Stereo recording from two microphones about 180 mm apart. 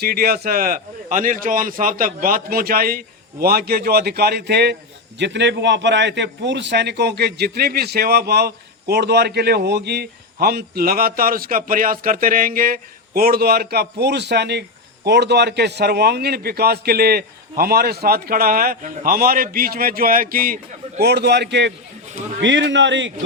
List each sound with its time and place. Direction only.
0.0 s a man's voice: 60° right (ahead or behind); by 23.1 s 90° right